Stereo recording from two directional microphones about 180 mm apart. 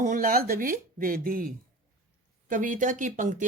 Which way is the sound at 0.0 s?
45° right (ahead or behind).